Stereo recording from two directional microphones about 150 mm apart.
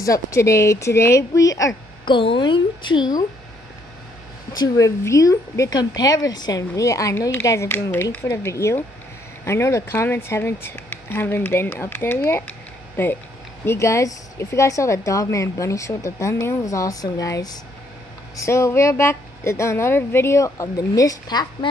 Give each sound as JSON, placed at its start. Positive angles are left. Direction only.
{"t": 0.0, "sound": "speech", "side_deg": 20}
{"t": 4.5, "sound": "speech", "side_deg": 20}